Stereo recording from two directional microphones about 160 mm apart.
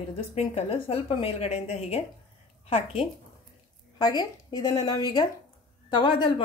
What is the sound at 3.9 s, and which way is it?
A woman's voice, 25° left (ahead or behind).